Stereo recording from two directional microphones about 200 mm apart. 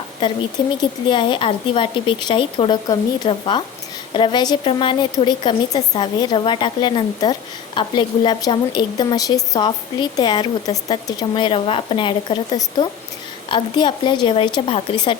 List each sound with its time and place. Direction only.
0.2 s a woman's voice: 20° left (ahead or behind)